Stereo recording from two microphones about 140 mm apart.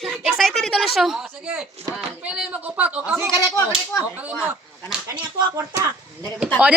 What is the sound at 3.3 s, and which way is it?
Speech, 30° left (ahead or behind).